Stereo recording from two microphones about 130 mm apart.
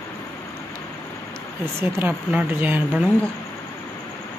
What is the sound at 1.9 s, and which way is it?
Speech, 15° right (ahead or behind).